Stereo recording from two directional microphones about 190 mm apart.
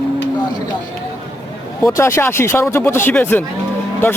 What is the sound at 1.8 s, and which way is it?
Speech, 15° left (ahead or behind).